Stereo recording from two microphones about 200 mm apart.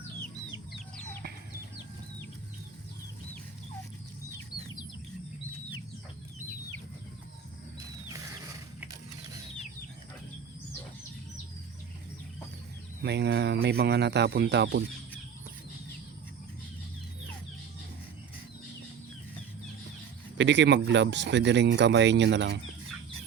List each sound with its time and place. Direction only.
0.9 s chicken: 10° left (ahead or behind)
13.0 s speech: 55° right (ahead or behind)
20.4 s speech: 60° right (ahead or behind)